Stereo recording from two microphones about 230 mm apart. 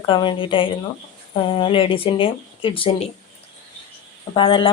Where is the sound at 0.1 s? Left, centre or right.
Left.